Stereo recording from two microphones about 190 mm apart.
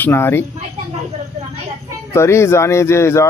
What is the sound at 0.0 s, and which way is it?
Speech, 10° left (ahead or behind).